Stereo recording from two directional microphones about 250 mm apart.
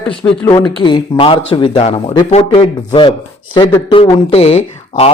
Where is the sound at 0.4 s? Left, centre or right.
Centre.